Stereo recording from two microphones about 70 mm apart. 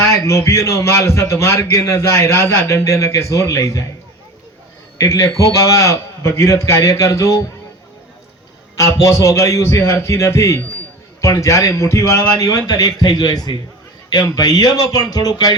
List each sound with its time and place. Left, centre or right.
0.0 s a man's voice: left
4.9 s a man's voice: left
8.8 s a man's voice: left
12.4 s speech: left